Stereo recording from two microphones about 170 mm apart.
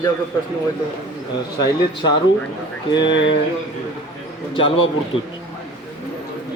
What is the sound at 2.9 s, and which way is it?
Speech, 25° left (ahead or behind).